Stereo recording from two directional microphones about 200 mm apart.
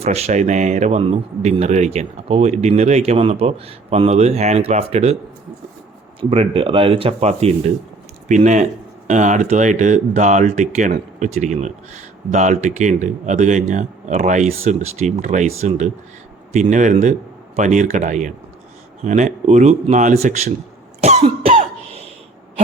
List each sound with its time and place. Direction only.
0.0 s speech: 30° right (ahead or behind)
6.1 s speech: 30° right (ahead or behind)
21.0 s cough: 35° right (ahead or behind)